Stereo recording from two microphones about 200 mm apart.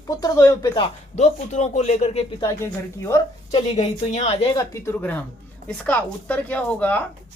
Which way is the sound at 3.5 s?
30° left (ahead or behind).